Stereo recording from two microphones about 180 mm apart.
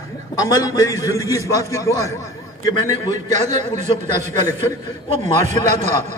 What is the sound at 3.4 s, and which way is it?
Speech, 40° right (ahead or behind).